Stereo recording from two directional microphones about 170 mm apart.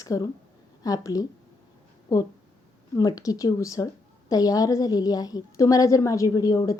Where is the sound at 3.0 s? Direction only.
20° left (ahead or behind).